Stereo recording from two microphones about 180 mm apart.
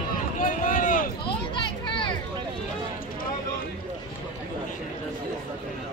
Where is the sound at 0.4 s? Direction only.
50° left (ahead or behind).